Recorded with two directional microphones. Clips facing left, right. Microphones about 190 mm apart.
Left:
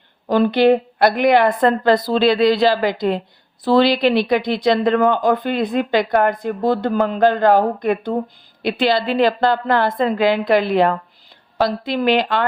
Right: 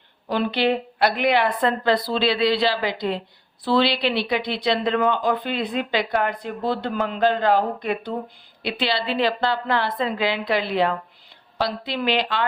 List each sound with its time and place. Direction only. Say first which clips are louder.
0.3 s speech: left 8 dB; 45° left (ahead or behind)